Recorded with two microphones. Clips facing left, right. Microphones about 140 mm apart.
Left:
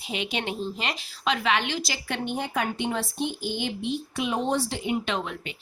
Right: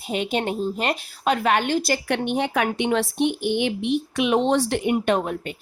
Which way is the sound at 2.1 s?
65° right (ahead or behind).